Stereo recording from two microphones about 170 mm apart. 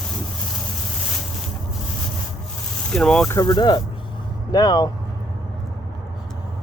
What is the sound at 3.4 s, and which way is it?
Speech, 25° left (ahead or behind).